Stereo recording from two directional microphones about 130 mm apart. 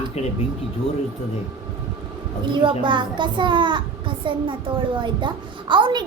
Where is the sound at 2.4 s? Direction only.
40° right (ahead or behind).